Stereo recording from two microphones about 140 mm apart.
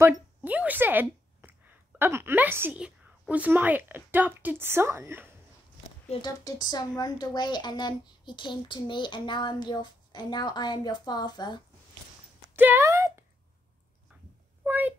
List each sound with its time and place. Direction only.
0.0 s a woman's voice: 10° right (ahead or behind)
6.2 s a woman's voice: 30° left (ahead or behind)
12.5 s a woman's voice: 15° right (ahead or behind)
14.6 s a child's voice: 10° right (ahead or behind)